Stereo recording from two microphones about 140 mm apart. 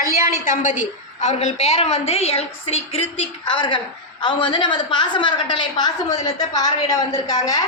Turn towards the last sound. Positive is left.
turn(degrees=25)  # may be behind; listen again after turning